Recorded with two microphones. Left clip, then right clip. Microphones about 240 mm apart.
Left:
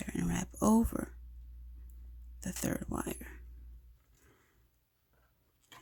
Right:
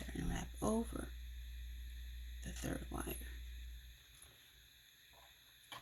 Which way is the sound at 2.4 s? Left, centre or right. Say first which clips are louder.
Left 8 dB; left.